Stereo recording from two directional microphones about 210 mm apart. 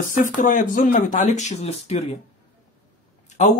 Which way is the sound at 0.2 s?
40° left (ahead or behind).